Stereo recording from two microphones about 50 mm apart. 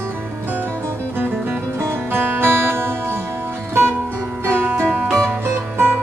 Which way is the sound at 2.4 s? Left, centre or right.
Right.